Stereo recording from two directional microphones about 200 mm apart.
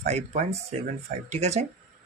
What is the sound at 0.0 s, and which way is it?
Speech, 35° right (ahead or behind).